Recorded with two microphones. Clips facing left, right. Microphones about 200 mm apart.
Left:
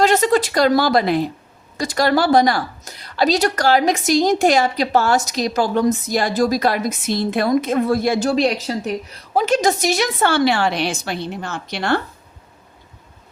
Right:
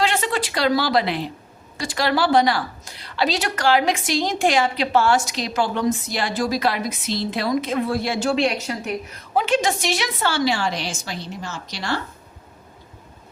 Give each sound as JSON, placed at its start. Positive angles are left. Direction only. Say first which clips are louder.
{"t": 0.0, "sound": "a woman's voice", "louder": "left 7 dB", "side_deg": 40}